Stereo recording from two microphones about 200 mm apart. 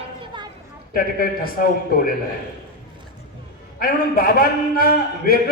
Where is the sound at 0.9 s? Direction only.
45° left (ahead or behind).